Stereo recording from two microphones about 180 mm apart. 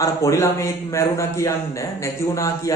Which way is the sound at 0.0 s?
15° left (ahead or behind).